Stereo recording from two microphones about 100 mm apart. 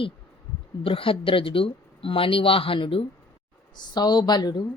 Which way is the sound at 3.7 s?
45° left (ahead or behind).